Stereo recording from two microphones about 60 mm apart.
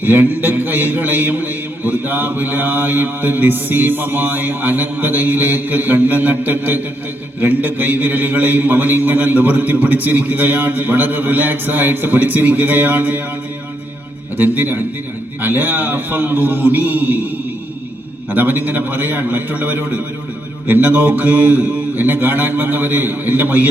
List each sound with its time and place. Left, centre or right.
0.0 s a man's voice: right
14.3 s a man's voice: right
18.3 s a man's voice: right